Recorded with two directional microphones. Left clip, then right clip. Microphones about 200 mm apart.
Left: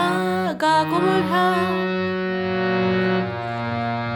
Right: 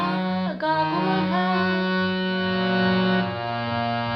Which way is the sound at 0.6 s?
60° left (ahead or behind).